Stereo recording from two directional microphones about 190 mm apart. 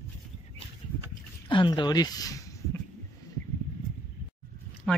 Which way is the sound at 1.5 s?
25° left (ahead or behind).